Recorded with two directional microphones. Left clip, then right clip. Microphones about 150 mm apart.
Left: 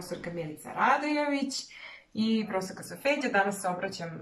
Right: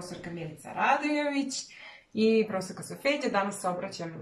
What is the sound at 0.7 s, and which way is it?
Speech, 20° right (ahead or behind).